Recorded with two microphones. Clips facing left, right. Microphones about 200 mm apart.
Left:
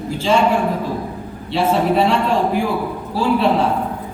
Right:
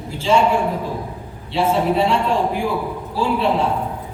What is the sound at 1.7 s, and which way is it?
A man's voice, 80° left.